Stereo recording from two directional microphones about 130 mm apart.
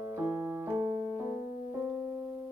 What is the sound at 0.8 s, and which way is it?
Keyboard, 30° right (ahead or behind).